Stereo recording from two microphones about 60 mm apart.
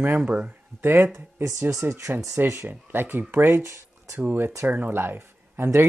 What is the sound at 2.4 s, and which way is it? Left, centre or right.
Speech, right.